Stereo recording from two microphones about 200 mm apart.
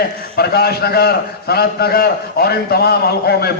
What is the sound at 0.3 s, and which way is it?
A man's voice, 50° left (ahead or behind).